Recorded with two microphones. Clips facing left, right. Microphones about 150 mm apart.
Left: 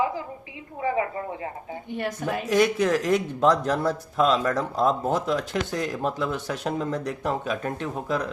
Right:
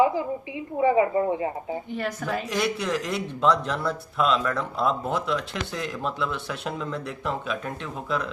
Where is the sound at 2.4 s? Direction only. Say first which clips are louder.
Left 8 dB; 45° left (ahead or behind).